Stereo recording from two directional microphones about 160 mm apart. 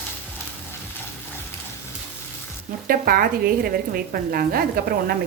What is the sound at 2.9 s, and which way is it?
A woman's voice, 65° right (ahead or behind).